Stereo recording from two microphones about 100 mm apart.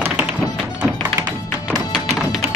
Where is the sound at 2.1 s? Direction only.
5° right (ahead or behind).